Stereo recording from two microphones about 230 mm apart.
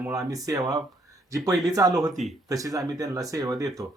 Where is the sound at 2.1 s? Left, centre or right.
Centre.